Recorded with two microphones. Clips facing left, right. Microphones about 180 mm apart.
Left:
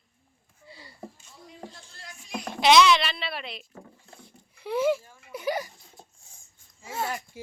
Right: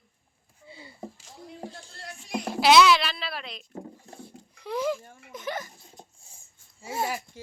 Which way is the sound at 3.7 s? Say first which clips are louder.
Right 7 dB; 25° right (ahead or behind).